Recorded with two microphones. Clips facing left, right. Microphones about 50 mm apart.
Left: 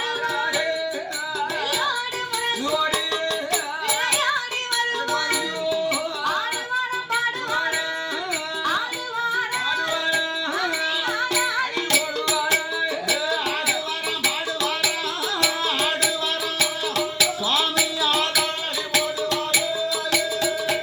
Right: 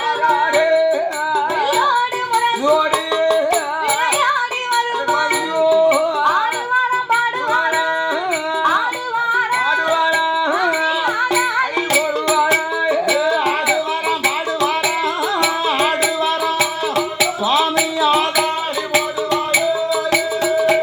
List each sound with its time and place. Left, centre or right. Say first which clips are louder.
0.3 s music: right 11 dB; right
4.7 s music: right 6 dB; right
9.3 s music: right 9 dB; right
12.8 s music: right 8 dB; right
17.2 s music: right 7 dB; right